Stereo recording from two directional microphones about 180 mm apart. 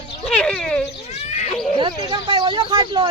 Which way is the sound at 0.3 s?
5° left (ahead or behind).